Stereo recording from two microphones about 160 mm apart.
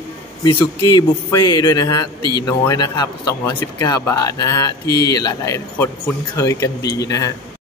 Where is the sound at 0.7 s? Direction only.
25° left (ahead or behind).